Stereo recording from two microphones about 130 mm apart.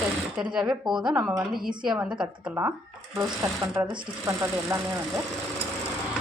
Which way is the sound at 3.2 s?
20° right (ahead or behind).